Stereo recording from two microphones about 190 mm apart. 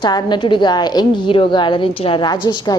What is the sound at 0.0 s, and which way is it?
A woman's voice, 20° left (ahead or behind).